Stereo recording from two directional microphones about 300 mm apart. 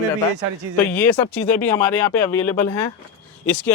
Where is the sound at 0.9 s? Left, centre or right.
Centre.